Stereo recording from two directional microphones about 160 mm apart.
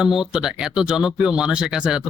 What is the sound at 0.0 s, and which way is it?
Music, 5° right (ahead or behind).